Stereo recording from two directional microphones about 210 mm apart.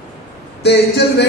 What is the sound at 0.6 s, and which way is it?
Speech, 50° left (ahead or behind).